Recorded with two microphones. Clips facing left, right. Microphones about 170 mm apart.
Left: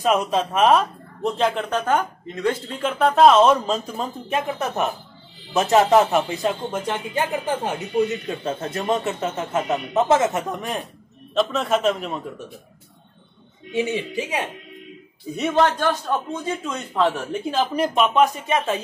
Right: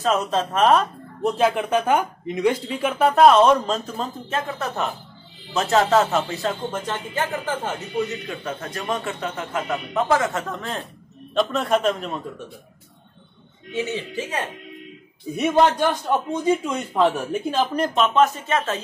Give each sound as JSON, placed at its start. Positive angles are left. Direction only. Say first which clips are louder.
{"t": 0.0, "sound": "speech", "louder": "left 1 dB", "side_deg": 10}
{"t": 1.2, "sound": "speech", "louder": "right 2 dB", "side_deg": -5}
{"t": 8.3, "sound": "speech", "louder": "left 4 dB", "side_deg": 25}
{"t": 11.3, "sound": "speech", "louder": "even", "side_deg": 0}
{"t": 13.7, "sound": "speech", "louder": "left 3 dB", "side_deg": 15}
{"t": 15.3, "sound": "a man's voice", "louder": "right 2 dB", "side_deg": -15}
{"t": 17.5, "sound": "speech", "louder": "left 1 dB", "side_deg": 5}